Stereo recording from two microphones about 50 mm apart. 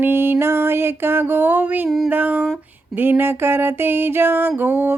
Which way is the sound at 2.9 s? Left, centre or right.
Right.